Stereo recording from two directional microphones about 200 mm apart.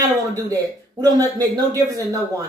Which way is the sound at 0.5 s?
15° right (ahead or behind).